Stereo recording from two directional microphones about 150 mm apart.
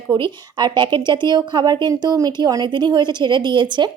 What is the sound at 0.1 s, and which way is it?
A woman's voice, 30° right (ahead or behind).